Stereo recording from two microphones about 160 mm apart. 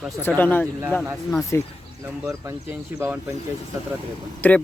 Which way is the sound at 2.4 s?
15° right (ahead or behind).